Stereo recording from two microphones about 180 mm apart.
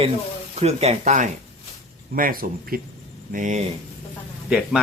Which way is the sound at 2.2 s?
50° right (ahead or behind).